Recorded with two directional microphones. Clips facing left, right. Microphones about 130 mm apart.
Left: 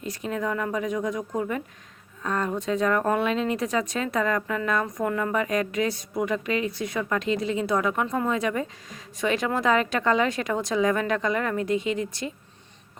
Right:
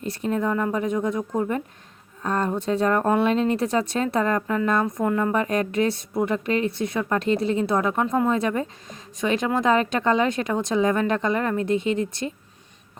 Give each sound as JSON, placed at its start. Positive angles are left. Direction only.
{"t": 0.0, "sound": "a woman's voice", "side_deg": -30}